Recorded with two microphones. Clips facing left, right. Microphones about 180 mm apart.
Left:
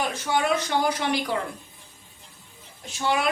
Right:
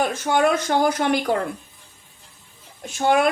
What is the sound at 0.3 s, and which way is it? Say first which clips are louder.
A woman's voice: right 5 dB; 50° right (ahead or behind).